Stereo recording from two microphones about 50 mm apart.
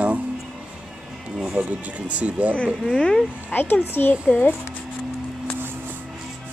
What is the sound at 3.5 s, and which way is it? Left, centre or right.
Speech, left.